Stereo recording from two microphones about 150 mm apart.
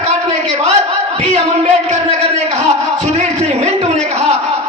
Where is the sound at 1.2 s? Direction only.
45° right (ahead or behind).